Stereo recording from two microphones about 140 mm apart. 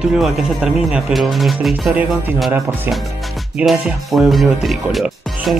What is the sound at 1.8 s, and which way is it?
Speech, 10° right (ahead or behind).